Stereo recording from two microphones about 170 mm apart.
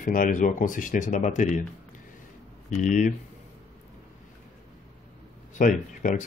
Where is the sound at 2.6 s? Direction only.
45° left (ahead or behind).